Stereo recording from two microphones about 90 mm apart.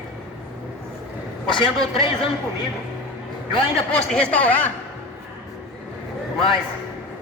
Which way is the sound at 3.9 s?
10° left (ahead or behind).